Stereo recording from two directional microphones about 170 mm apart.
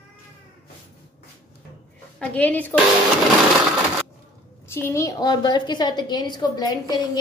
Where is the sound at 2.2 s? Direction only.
10° left (ahead or behind).